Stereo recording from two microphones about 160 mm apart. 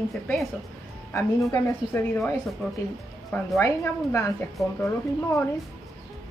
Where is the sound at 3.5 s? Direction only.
20° left (ahead or behind).